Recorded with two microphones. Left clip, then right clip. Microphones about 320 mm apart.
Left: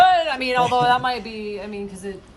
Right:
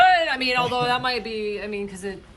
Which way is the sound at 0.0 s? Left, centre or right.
Left.